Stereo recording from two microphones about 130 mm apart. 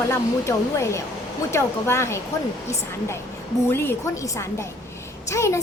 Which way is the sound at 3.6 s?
15° left (ahead or behind).